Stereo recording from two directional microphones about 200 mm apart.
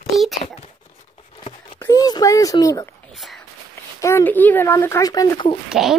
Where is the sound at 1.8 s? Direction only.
15° left (ahead or behind).